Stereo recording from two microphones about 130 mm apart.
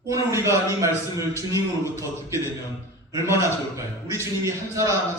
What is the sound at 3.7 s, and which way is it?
A man's voice, 20° right (ahead or behind).